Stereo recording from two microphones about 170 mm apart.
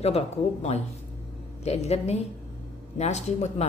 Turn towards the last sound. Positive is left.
turn(degrees=40)  # may be behind; listen again after turning